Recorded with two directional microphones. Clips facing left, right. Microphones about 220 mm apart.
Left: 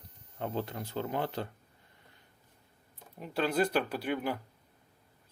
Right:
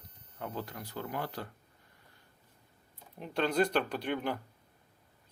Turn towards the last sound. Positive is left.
turn(degrees=5)  # may be behind; listen again after turning